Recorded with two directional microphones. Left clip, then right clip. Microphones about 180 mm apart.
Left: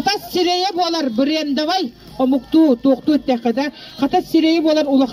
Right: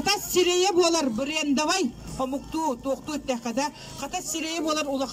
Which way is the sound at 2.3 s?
70° left (ahead or behind).